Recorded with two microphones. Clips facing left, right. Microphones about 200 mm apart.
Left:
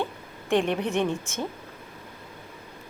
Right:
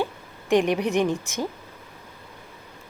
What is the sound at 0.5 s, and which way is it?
Speech, 10° right (ahead or behind).